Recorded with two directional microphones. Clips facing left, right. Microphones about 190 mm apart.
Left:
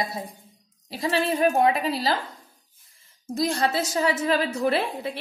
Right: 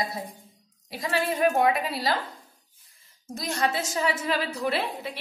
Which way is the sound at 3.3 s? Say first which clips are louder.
Left 4 dB; 30° left (ahead or behind).